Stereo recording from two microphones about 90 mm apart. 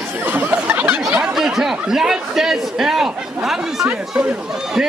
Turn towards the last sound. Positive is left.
turn(degrees=-10)  # may be behind; listen again after turning